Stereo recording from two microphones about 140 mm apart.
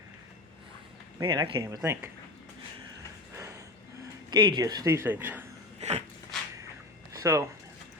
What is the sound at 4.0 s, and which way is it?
Speech, 30° right (ahead or behind).